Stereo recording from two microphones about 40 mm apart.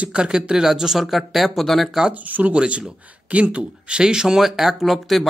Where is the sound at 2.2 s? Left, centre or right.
Right.